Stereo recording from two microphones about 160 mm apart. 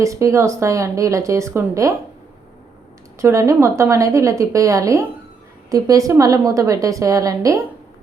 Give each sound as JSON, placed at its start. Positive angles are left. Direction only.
{"t": 0.0, "sound": "speech", "side_deg": -20}
{"t": 3.2, "sound": "speech", "side_deg": -15}